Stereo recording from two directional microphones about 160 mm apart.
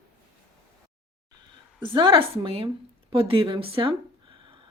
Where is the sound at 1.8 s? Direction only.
30° right (ahead or behind).